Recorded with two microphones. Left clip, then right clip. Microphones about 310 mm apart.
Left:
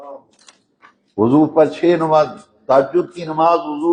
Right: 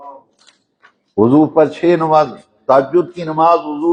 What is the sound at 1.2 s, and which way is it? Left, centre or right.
A man's voice, right.